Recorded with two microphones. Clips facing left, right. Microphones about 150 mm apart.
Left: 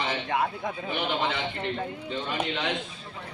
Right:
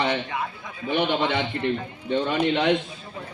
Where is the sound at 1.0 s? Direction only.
70° right (ahead or behind).